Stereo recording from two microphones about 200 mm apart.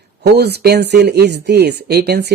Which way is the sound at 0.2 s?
55° right (ahead or behind).